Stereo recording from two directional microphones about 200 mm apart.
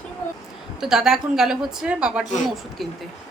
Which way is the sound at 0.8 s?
Centre (ahead or behind).